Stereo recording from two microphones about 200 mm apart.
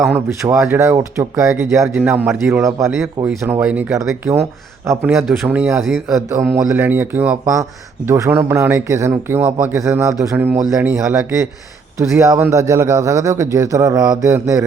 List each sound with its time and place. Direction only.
0.3 s speech: 15° right (ahead or behind)
6.3 s speech: 10° right (ahead or behind)